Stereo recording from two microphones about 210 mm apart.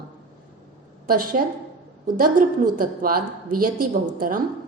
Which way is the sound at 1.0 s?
45° right (ahead or behind).